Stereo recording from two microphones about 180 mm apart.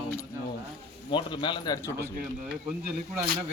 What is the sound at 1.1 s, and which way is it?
Speech, 25° left (ahead or behind).